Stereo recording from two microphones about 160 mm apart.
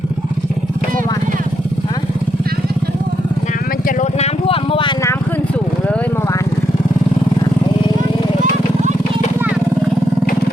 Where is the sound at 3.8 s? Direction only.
55° left (ahead or behind); by 5.0 s 30° left (ahead or behind).